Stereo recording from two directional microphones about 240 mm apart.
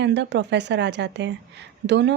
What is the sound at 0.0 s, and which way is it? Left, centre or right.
A woman's voice, right.